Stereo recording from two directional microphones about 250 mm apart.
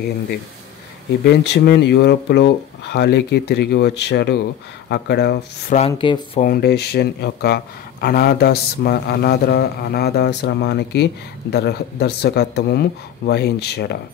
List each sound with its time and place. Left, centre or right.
1.2 s speech: left
5.8 s speech: left
6.4 s speech: left